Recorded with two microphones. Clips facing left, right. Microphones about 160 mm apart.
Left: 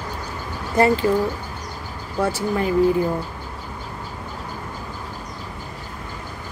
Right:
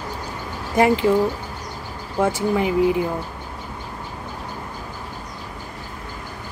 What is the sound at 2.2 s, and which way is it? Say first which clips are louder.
Speech: right 2 dB; 15° right (ahead or behind).